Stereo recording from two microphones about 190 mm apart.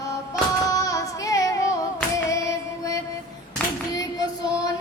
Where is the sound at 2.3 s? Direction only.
15° left (ahead or behind).